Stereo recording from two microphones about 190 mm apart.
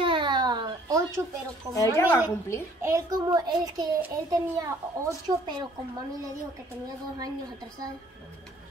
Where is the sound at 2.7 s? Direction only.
15° right (ahead or behind).